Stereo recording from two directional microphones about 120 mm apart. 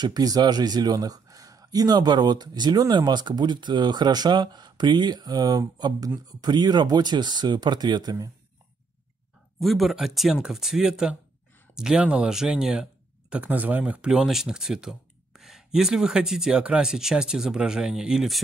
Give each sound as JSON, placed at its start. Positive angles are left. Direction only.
{"t": 0.0, "sound": "speech", "side_deg": -35}
{"t": 9.6, "sound": "speech", "side_deg": 0}